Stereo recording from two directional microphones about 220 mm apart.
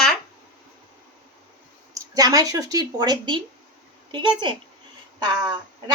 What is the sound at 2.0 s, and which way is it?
Speech, 15° right (ahead or behind).